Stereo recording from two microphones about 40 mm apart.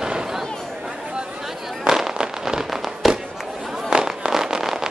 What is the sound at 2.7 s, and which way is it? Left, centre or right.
Fireworks, centre.